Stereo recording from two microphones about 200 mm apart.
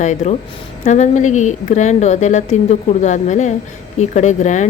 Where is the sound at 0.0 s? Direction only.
35° left (ahead or behind).